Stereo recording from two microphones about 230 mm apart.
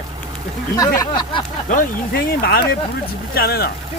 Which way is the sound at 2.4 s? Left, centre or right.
Left.